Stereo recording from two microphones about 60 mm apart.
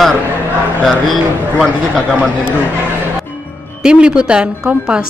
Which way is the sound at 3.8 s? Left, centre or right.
Centre.